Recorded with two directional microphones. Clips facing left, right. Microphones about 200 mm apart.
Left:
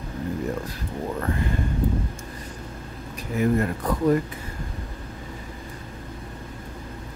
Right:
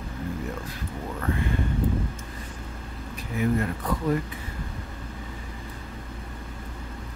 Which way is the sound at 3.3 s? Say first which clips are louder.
Left 3 dB; 45° left (ahead or behind).